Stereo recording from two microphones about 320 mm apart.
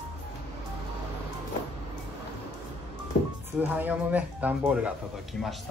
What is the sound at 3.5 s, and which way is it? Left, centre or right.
Speech, centre.